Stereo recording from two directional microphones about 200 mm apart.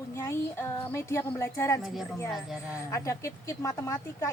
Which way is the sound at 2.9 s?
15° left (ahead or behind).